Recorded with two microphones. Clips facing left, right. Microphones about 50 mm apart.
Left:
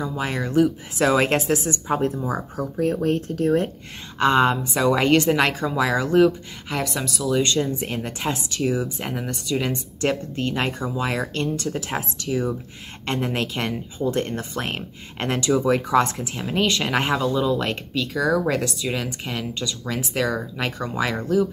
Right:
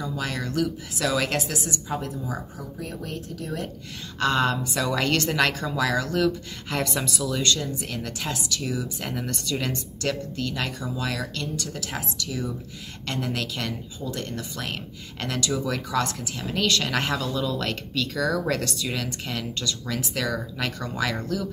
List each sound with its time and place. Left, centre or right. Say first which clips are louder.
0.0 s a woman's voice: left 4 dB; left
4.2 s speech: left 5 dB; left
6.7 s a woman's voice: left 1 dB; centre
7.3 s speech: left 6 dB; left
9.1 s speech: left 2 dB; centre
10.0 s a woman's voice: left 5 dB; left; by 19.9 s centre
19.9 s speech: left 5 dB; left